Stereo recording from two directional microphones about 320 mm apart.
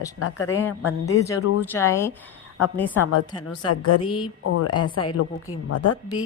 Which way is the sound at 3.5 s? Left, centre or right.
Left.